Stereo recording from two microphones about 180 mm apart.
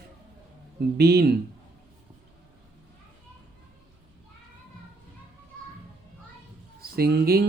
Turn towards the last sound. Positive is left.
turn(degrees=-60)  # may be behind; listen again after turning